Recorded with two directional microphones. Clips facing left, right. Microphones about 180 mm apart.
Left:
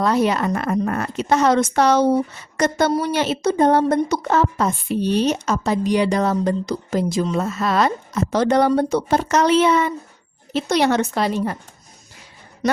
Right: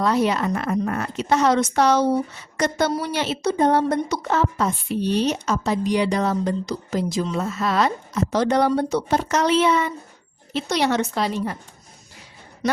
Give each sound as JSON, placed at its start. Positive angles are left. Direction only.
{"t": 0.0, "sound": "speech", "side_deg": 50}